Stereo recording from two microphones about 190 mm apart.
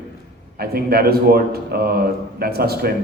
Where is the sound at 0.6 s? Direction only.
55° right (ahead or behind).